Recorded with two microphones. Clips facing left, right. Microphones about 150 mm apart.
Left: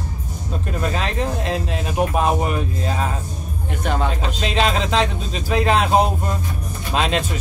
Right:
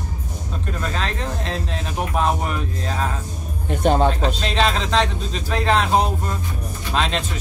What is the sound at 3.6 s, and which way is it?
Speech, 35° right (ahead or behind).